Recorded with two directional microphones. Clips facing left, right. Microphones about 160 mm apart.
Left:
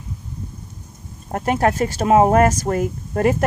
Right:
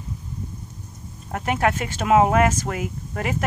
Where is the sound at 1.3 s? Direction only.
35° left (ahead or behind).